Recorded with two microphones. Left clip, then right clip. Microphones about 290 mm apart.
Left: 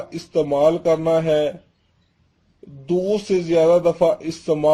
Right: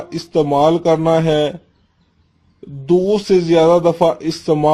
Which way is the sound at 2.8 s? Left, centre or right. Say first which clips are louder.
Right 6 dB; right.